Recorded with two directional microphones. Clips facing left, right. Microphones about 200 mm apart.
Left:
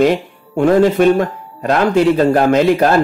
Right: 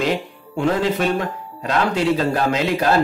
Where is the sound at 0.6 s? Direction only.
55° left (ahead or behind).